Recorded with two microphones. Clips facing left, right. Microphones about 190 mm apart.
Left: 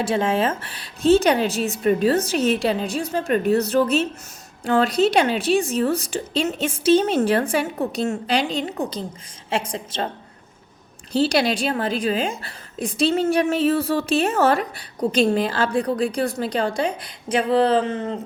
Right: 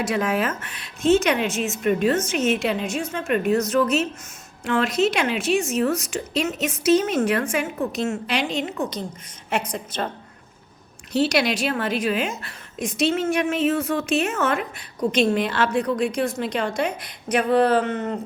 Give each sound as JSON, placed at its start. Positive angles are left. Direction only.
{"t": 0.0, "sound": "a woman's voice", "side_deg": 30}
{"t": 11.1, "sound": "a woman's voice", "side_deg": 30}